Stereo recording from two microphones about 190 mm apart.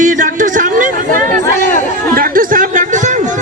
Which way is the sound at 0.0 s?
45° right (ahead or behind).